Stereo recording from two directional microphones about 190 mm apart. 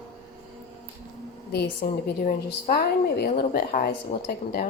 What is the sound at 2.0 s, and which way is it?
Speech, 50° left (ahead or behind).